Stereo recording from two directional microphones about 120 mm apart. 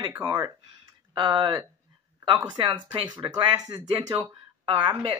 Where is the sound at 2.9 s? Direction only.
30° right (ahead or behind).